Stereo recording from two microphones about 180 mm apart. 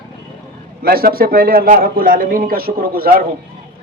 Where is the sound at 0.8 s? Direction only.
55° right (ahead or behind).